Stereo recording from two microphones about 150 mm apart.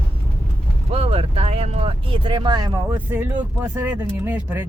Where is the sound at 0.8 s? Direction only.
40° right (ahead or behind).